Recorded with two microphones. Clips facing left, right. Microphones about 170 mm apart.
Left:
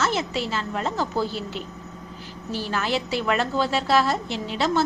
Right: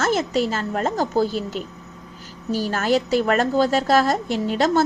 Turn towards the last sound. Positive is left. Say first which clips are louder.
# right 4 dB
turn(degrees=-45)  # may be behind; listen again after turning